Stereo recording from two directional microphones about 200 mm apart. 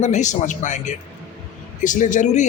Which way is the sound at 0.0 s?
35° left (ahead or behind).